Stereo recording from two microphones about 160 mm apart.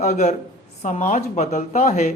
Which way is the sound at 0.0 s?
45° left (ahead or behind).